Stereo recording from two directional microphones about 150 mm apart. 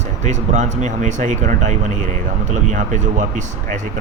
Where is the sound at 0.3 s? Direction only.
55° right (ahead or behind).